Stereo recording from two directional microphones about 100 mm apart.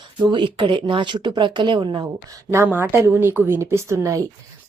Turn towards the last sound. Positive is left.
turn(degrees=-30)  # may be behind; listen again after turning